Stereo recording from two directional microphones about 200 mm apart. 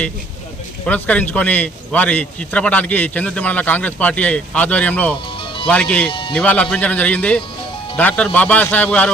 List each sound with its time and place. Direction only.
0.9 s a man's voice: 5° left (ahead or behind)
6.1 s speech: 25° left (ahead or behind)
6.3 s a man's voice: 5° left (ahead or behind)